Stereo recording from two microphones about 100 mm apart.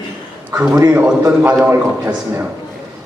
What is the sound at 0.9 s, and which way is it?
Speech, 15° right (ahead or behind).